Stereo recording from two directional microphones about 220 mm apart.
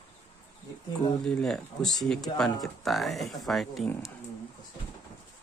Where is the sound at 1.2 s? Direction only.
5° left (ahead or behind).